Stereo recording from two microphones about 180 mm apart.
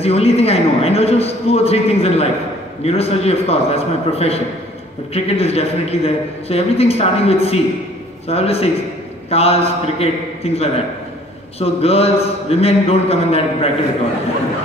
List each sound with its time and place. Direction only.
0.0 s a man's voice: 35° left (ahead or behind)